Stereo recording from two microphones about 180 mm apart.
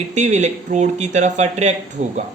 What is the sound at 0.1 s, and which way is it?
Speech, 40° right (ahead or behind).